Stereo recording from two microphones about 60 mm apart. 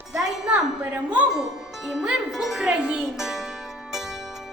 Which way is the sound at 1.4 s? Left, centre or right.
Centre.